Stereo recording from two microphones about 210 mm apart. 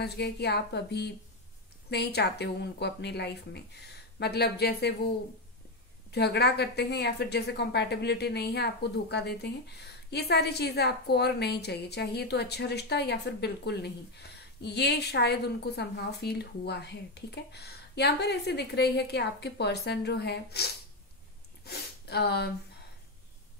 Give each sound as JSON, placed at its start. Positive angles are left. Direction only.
{"t": 0.0, "sound": "a woman's voice", "side_deg": 50}